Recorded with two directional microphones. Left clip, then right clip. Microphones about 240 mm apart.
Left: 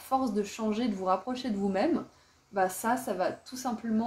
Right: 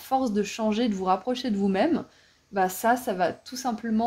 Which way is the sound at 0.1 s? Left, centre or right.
Right.